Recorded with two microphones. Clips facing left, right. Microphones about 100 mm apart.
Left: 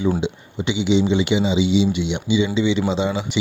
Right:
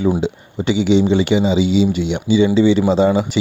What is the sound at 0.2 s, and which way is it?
Speech, 40° right (ahead or behind).